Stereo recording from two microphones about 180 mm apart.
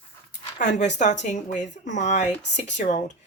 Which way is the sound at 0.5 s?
40° left (ahead or behind).